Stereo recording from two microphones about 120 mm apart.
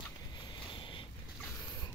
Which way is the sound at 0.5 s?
45° left (ahead or behind).